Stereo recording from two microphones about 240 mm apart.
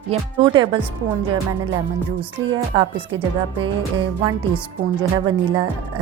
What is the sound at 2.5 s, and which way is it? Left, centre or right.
A woman's voice, centre.